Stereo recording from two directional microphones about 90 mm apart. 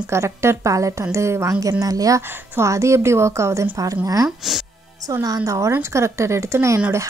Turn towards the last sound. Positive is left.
turn(degrees=-30)  # may be behind; listen again after turning